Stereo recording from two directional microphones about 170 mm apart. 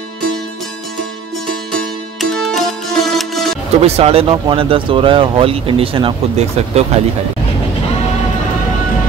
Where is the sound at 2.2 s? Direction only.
Centre (ahead or behind).